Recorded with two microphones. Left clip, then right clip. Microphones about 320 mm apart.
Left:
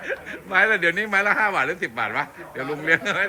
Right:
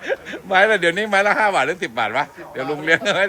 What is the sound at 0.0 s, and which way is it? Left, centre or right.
Speech, centre.